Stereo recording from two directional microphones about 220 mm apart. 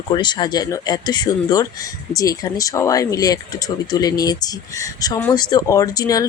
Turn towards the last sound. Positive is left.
turn(degrees=15)  # may be behind; listen again after turning